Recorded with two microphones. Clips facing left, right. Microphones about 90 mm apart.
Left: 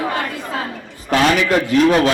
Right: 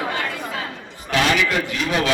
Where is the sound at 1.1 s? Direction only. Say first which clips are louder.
Left 5 dB; 40° left (ahead or behind).